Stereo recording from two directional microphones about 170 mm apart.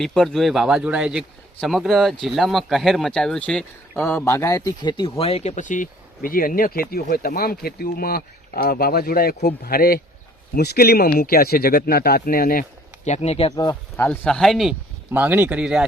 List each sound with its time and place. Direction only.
0.0 s speech: centre (ahead or behind); by 12.6 s 60° left (ahead or behind)
13.1 s speech: 40° left (ahead or behind)
13.9 s speech: 10° left (ahead or behind)